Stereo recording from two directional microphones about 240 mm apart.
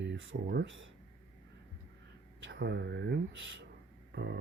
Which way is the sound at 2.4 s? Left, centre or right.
Right.